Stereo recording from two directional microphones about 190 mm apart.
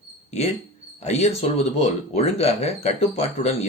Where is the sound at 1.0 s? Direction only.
35° left (ahead or behind).